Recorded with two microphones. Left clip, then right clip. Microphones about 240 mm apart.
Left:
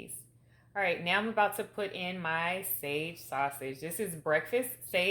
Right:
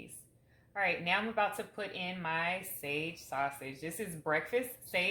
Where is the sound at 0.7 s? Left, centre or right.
Left.